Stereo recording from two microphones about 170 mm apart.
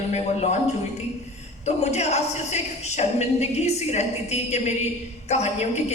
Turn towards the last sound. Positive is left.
turn(degrees=40)  # may be behind; listen again after turning